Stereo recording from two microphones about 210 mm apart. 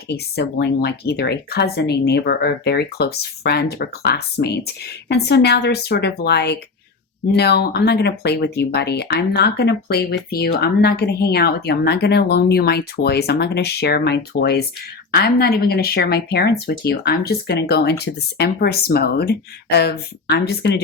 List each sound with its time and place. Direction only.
0.1 s speech: 50° left (ahead or behind)